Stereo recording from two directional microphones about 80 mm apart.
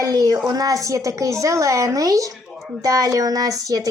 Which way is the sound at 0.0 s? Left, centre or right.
Right.